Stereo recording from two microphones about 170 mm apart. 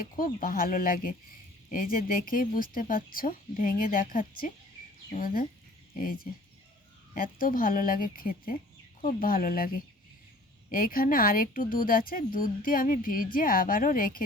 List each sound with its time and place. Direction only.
0.3 s speech: 55° left (ahead or behind)